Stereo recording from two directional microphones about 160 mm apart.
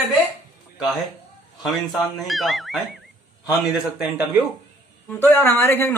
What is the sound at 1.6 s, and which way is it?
Speech, centre (ahead or behind).